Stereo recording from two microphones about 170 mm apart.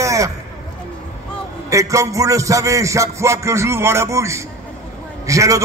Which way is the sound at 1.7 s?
20° right (ahead or behind).